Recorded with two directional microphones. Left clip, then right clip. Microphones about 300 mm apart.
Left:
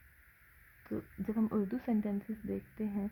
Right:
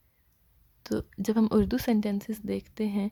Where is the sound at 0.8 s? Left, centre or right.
Right.